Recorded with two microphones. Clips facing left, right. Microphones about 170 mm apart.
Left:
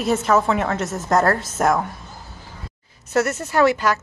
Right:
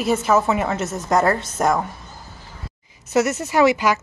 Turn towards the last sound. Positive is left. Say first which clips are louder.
# right 1 dB
turn(degrees=-10)  # may be behind; listen again after turning